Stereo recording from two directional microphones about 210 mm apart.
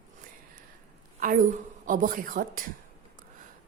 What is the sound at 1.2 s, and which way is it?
A woman's voice, 40° right (ahead or behind).